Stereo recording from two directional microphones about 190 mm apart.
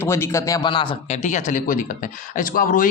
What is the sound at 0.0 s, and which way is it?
Speech, 15° left (ahead or behind).